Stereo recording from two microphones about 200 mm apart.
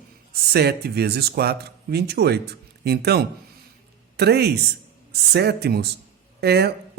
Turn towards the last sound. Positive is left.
turn(degrees=-55)  # may be behind; listen again after turning